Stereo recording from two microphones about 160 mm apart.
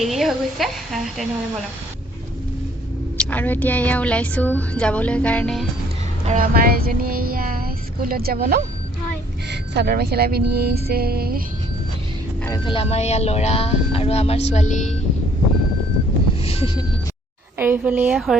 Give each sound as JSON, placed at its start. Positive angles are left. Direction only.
{"t": 0.0, "sound": "a woman's voice", "side_deg": 0}
{"t": 3.2, "sound": "a woman's voice", "side_deg": 10}
{"t": 6.2, "sound": "child singing", "side_deg": -60}
{"t": 9.5, "sound": "child singing", "side_deg": -85}
{"t": 12.6, "sound": "speech", "side_deg": 35}
{"t": 16.4, "sound": "vehicle", "side_deg": 40}
{"t": 17.6, "sound": "a woman's voice", "side_deg": -10}